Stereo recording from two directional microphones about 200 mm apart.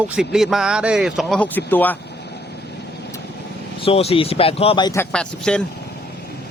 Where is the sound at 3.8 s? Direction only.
30° left (ahead or behind).